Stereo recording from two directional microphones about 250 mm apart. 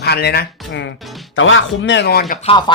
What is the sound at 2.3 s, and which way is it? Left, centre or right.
Speech, left.